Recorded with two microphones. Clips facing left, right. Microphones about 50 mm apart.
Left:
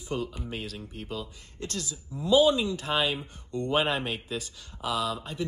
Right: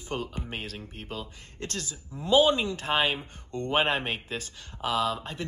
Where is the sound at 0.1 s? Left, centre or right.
Right.